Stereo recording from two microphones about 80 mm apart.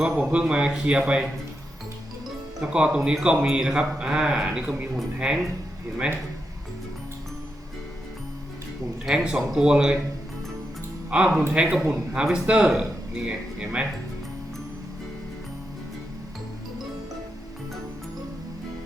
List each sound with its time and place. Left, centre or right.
0.1 s speech: centre
2.6 s speech: centre
9.0 s speech: centre
11.1 s speech: centre